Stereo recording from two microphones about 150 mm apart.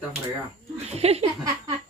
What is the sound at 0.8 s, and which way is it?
Speech, 45° right (ahead or behind).